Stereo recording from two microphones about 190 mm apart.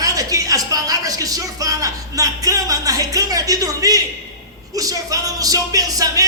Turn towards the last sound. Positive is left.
turn(degrees=-20)  # may be behind; listen again after turning